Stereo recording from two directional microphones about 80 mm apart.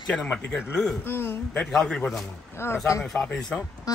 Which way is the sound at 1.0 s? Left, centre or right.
Left.